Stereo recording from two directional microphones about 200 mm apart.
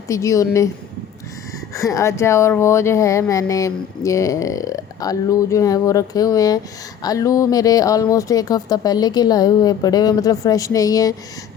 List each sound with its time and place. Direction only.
0.1 s speech: 15° left (ahead or behind)
1.7 s speech: 15° left (ahead or behind)